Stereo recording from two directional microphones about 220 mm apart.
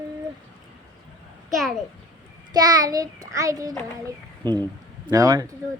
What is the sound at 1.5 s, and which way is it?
Speech, centre (ahead or behind).